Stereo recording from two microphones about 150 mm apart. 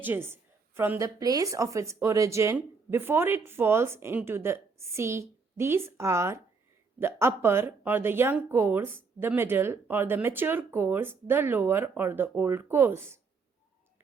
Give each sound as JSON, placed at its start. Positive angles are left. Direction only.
{"t": 0.0, "sound": "speech", "side_deg": -15}